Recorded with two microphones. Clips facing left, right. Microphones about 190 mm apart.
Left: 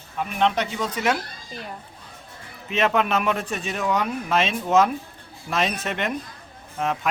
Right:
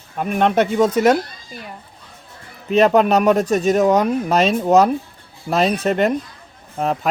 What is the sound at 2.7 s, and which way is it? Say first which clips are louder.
Speech: right 8 dB; 40° right (ahead or behind).